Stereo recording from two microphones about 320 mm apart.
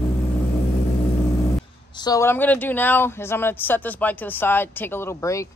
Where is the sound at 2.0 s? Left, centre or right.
Centre.